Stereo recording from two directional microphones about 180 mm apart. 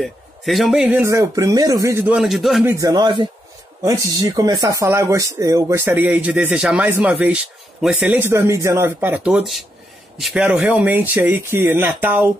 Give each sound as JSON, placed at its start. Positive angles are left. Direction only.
{"t": 0.0, "sound": "speech", "side_deg": 0}
{"t": 2.1, "sound": "speech", "side_deg": 0}
{"t": 2.6, "sound": "speech", "side_deg": -15}